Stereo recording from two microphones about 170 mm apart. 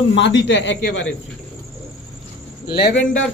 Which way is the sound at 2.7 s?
75° left (ahead or behind).